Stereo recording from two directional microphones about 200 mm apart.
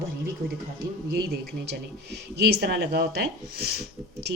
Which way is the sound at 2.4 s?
50° right (ahead or behind).